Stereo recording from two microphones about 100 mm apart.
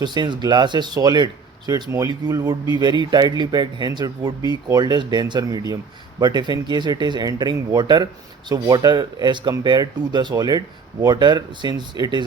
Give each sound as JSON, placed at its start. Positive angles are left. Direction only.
{"t": 0.0, "sound": "speech", "side_deg": -45}